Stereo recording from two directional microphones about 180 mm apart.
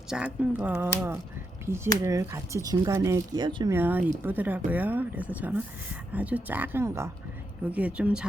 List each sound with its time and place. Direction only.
0.1 s speech: 5° right (ahead or behind); by 3.8 s 20° right (ahead or behind)
3.8 s speech: 10° right (ahead or behind)